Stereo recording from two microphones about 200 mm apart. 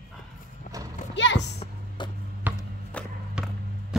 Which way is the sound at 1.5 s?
25° left (ahead or behind).